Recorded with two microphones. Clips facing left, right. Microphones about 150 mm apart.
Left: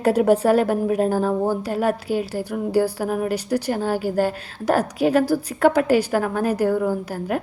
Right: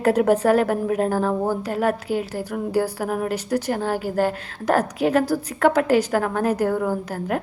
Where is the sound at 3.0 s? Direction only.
25° left (ahead or behind).